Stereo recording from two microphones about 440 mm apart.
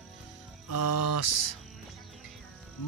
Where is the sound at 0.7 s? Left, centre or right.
Left.